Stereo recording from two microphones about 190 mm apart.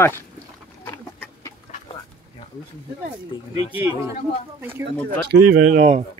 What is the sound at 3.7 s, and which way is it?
Speech, 15° right (ahead or behind).